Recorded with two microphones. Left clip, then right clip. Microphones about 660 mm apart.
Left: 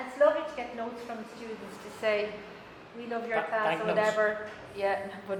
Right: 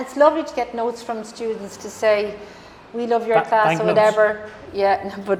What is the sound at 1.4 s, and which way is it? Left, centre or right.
Speech, right.